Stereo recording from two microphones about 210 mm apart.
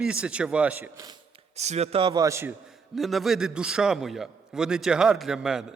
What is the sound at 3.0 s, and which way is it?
A man's voice, centre (ahead or behind).